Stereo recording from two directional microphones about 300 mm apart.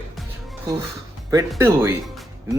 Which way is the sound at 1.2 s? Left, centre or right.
Centre.